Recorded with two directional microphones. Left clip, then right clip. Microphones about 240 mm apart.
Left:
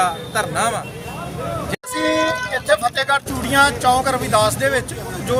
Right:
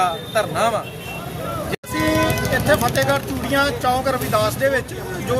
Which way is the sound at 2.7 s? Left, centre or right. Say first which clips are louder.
Left 2 dB; centre.